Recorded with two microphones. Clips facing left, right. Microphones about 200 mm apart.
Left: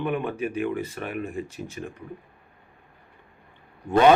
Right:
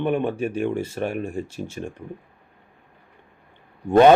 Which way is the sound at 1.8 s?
40° right (ahead or behind).